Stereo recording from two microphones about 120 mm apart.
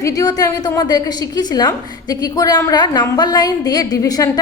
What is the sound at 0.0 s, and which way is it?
A woman's voice, 30° left (ahead or behind).